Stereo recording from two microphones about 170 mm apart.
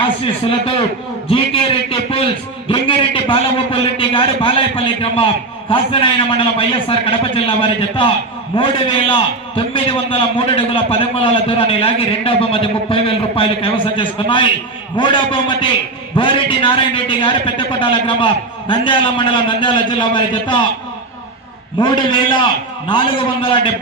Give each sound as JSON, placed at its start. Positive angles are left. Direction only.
{"t": 0.2, "sound": "a man's voice", "side_deg": 35}
{"t": 21.8, "sound": "a man's voice", "side_deg": 25}